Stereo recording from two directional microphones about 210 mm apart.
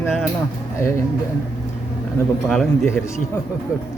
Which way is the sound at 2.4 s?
5° left (ahead or behind).